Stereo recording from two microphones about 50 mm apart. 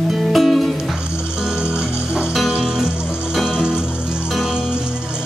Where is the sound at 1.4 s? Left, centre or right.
Centre.